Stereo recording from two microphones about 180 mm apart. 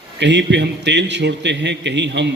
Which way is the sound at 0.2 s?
75° right (ahead or behind).